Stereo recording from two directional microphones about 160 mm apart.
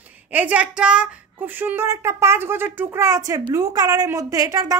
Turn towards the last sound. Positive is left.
turn(degrees=-20)  # may be behind; listen again after turning